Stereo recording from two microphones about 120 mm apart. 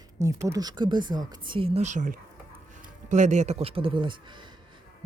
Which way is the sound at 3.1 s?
80° right.